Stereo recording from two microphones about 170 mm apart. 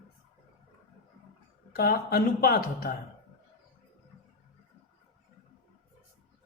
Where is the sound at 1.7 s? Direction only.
65° left (ahead or behind).